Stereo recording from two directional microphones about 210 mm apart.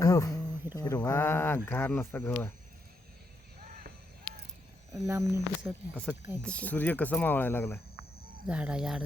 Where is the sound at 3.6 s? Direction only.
45° right (ahead or behind).